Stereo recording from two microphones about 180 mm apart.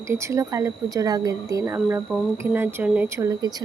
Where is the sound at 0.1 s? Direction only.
15° right (ahead or behind).